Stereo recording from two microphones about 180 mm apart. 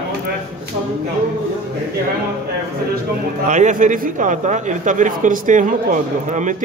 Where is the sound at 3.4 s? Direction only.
40° right (ahead or behind).